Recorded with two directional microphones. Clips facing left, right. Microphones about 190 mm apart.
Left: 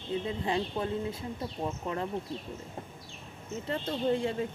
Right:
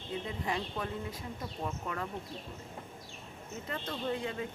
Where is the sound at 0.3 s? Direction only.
25° left (ahead or behind).